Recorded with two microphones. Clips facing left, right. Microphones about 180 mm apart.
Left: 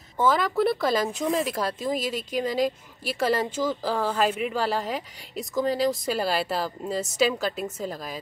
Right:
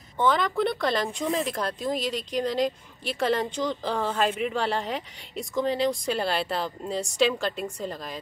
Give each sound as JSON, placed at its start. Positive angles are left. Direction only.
{"t": 0.2, "sound": "speech", "side_deg": 5}